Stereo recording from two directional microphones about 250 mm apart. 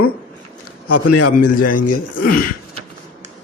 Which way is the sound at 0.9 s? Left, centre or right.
Left.